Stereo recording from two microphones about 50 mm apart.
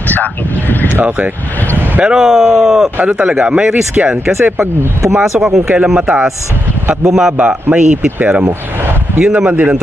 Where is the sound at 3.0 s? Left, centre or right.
Right.